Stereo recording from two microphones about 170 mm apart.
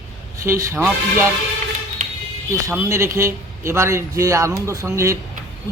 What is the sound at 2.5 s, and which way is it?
A man's voice, 15° right (ahead or behind).